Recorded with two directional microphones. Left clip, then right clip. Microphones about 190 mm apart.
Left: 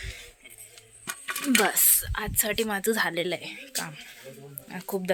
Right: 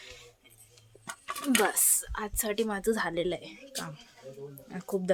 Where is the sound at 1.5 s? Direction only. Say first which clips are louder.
Left 4 dB; 10° left (ahead or behind).